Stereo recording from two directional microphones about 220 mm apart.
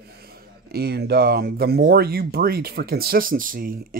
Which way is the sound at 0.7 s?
45° right (ahead or behind).